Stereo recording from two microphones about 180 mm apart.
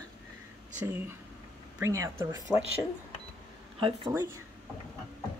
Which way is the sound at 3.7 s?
30° right (ahead or behind).